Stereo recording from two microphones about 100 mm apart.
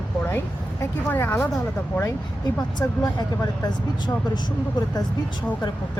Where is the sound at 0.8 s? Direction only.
20° left (ahead or behind).